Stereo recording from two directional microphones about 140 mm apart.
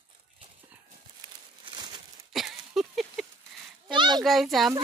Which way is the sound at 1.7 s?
30° right (ahead or behind).